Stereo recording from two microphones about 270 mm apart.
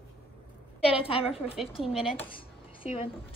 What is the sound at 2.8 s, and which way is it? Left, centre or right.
Speech, left.